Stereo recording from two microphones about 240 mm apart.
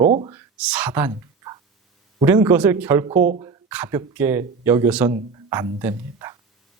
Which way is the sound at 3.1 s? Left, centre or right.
Right.